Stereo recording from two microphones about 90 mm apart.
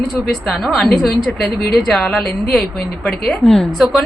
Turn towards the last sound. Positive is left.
turn(degrees=0)  # may be behind; listen again after turning